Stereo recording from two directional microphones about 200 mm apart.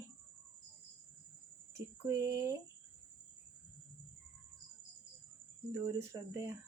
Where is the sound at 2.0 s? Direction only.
15° right (ahead or behind).